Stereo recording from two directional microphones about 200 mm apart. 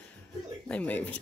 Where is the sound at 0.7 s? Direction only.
5° left (ahead or behind).